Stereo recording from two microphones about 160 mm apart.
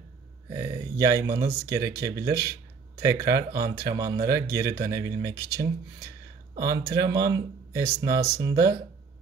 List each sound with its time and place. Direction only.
0.5 s speech: 20° right (ahead or behind)